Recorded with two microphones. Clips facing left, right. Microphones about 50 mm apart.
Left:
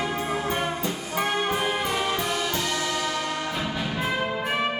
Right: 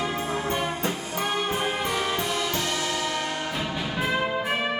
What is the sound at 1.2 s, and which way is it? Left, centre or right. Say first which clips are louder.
Brass instrument: left 3 dB; left.